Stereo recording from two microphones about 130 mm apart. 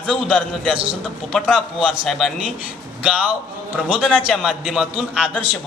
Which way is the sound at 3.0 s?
10° right (ahead or behind).